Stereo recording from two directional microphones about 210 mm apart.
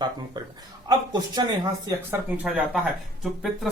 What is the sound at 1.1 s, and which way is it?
Speech, 20° right (ahead or behind).